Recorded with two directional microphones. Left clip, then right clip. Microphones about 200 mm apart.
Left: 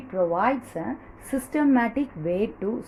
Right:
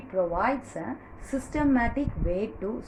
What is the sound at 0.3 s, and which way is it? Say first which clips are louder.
A woman's voice: left 3 dB; 45° left (ahead or behind).